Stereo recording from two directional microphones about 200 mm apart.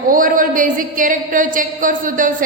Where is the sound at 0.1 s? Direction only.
45° right (ahead or behind).